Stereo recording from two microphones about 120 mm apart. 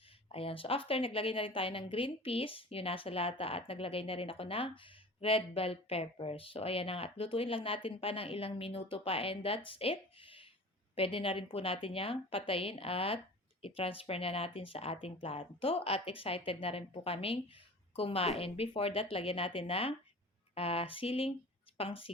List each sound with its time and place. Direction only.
0.3 s a woman's voice: 50° left (ahead or behind)